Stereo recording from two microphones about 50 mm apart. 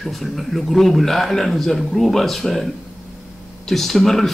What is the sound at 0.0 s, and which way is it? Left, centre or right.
Speech, centre.